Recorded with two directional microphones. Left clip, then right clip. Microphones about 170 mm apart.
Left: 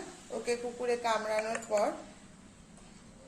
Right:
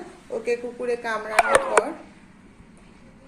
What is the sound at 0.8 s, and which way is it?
Speech, 20° right (ahead or behind).